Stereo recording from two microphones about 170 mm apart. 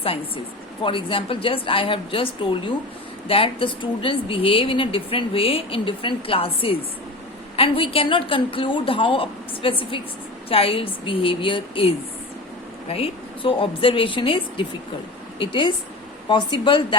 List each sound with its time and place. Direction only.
0.8 s a woman's voice: 30° left (ahead or behind)